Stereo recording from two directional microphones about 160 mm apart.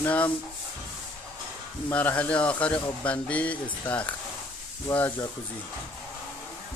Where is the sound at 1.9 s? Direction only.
10° left (ahead or behind).